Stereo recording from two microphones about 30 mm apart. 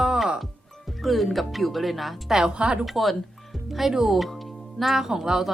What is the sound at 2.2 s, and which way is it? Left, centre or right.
Speech, centre.